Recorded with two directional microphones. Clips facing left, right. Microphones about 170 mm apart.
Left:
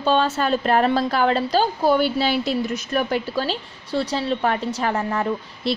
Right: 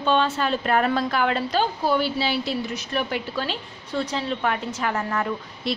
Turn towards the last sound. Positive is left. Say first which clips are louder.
# left 3 dB
turn(degrees=25)  # may be behind; listen again after turning